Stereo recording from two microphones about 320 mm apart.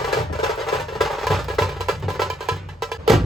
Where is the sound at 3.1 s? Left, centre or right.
Centre.